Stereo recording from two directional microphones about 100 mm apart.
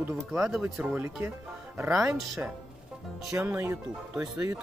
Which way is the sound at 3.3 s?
20° right (ahead or behind).